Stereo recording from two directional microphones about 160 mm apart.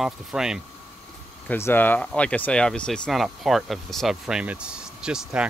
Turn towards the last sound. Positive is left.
turn(degrees=-5)  # may be behind; listen again after turning